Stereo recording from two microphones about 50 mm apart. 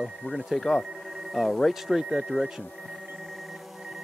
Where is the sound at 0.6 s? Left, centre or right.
Centre.